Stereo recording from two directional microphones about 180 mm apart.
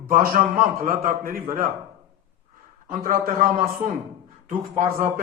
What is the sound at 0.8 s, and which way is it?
Speech, 55° right (ahead or behind).